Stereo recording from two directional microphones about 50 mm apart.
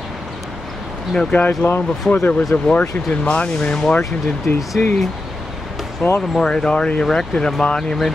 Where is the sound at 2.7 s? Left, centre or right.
Left.